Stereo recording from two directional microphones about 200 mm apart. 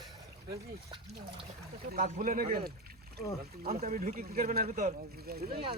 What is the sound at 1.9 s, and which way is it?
Speech, 40° right (ahead or behind).